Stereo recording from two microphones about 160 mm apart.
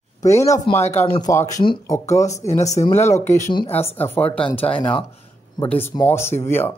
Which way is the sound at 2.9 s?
15° left (ahead or behind).